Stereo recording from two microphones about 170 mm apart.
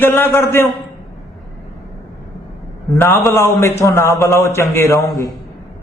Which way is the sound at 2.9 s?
15° left (ahead or behind).